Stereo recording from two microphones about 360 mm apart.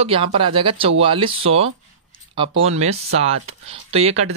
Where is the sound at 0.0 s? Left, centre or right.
Centre.